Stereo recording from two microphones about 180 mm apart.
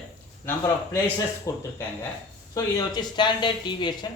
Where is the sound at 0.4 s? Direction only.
10° left (ahead or behind).